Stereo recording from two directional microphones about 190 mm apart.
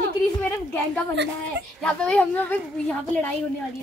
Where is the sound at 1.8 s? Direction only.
5° left (ahead or behind).